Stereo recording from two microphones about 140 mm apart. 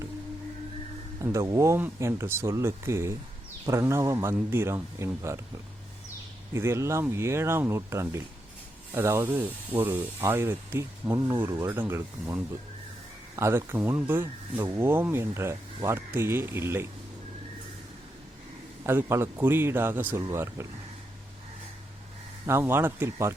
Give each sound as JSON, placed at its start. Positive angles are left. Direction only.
{"t": 1.2, "sound": "speech", "side_deg": -20}
{"t": 6.5, "sound": "speech", "side_deg": -20}
{"t": 18.9, "sound": "speech", "side_deg": -20}
{"t": 22.4, "sound": "speech", "side_deg": -20}